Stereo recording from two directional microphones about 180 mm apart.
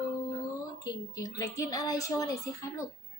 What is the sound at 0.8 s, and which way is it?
Speech, 20° left (ahead or behind).